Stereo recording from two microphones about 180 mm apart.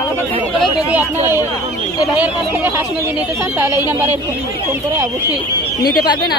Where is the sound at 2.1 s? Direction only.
10° right (ahead or behind).